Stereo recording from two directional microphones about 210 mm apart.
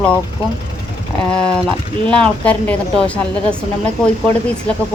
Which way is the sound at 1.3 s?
5° left (ahead or behind).